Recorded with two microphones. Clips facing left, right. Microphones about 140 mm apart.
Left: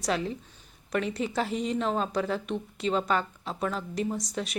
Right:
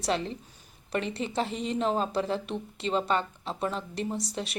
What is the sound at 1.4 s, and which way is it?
A woman's voice, centre (ahead or behind).